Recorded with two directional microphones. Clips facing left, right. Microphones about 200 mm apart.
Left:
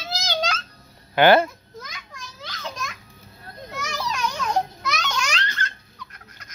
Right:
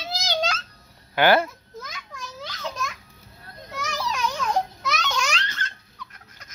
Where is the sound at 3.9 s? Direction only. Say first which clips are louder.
Even; centre (ahead or behind).